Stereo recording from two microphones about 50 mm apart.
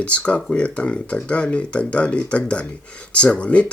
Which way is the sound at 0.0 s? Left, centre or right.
Left.